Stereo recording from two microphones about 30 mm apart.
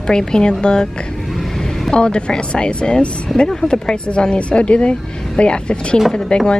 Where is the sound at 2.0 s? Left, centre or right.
Left.